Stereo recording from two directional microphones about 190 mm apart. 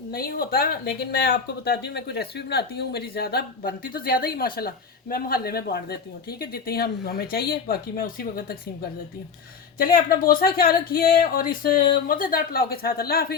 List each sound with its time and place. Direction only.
0.1 s speech: 50° left (ahead or behind)
9.7 s speech: 50° left (ahead or behind)